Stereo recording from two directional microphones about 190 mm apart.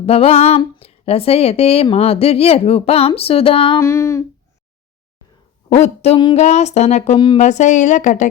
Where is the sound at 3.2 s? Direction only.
30° left (ahead or behind).